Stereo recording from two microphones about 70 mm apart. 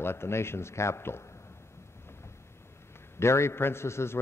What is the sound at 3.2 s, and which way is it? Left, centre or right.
A man's voice, left.